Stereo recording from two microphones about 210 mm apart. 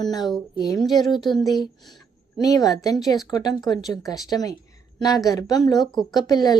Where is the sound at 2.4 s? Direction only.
15° left (ahead or behind).